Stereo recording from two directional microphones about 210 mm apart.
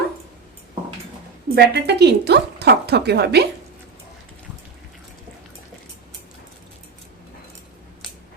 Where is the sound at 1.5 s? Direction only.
50° right (ahead or behind).